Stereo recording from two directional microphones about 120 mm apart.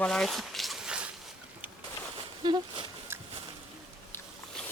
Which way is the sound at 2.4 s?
40° right (ahead or behind).